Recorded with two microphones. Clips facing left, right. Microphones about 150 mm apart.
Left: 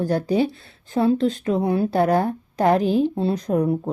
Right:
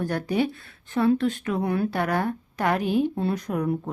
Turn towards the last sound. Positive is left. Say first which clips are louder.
# left 5 dB
turn(degrees=30)  # may be behind; listen again after turning